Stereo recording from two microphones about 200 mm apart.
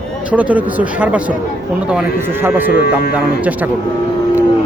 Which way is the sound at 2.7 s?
50° left (ahead or behind).